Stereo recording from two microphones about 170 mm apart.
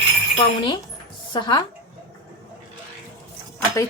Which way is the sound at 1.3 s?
25° left (ahead or behind).